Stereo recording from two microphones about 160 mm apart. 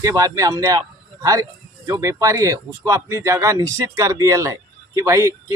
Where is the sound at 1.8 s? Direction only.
20° right (ahead or behind).